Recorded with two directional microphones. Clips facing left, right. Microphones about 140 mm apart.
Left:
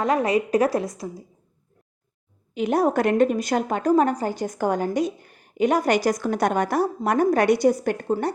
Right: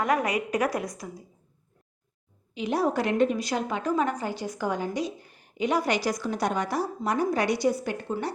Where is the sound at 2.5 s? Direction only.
50° left (ahead or behind).